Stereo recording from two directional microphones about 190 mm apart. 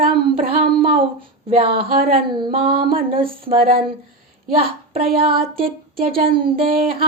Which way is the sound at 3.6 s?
50° right (ahead or behind).